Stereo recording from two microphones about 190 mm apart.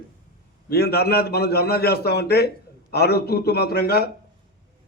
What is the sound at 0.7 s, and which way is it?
A man's voice, 55° left (ahead or behind).